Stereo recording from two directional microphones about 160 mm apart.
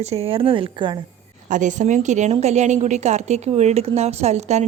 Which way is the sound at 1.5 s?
50° right (ahead or behind).